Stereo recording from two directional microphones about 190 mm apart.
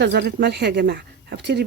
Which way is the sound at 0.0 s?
65° right (ahead or behind).